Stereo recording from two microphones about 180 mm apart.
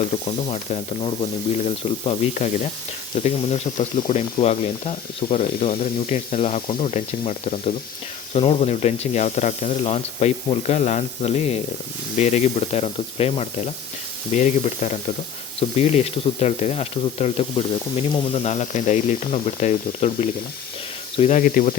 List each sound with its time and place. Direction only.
0.3 s speech: 35° left (ahead or behind); by 21.8 s 50° left (ahead or behind)